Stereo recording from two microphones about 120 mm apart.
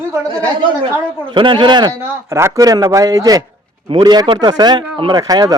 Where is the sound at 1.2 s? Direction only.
45° right (ahead or behind).